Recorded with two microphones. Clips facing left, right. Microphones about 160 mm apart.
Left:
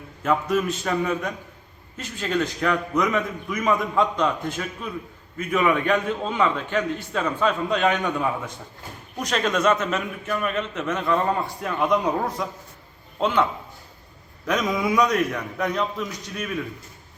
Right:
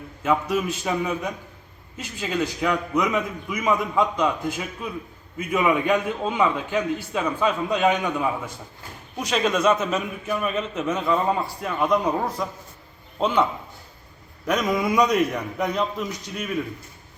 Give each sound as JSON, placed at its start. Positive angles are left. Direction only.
{"t": 0.2, "sound": "a man's voice", "side_deg": -5}
{"t": 14.4, "sound": "a man's voice", "side_deg": -5}
{"t": 15.0, "sound": "a man's voice", "side_deg": -15}